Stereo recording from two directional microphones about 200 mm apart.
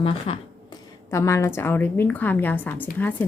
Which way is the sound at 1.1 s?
15° left (ahead or behind).